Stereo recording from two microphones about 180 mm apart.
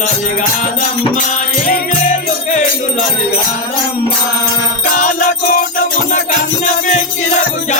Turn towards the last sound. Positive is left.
turn(degrees=50)  # may be behind; listen again after turning